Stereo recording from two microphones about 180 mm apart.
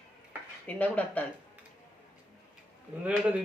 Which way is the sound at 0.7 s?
10° left (ahead or behind).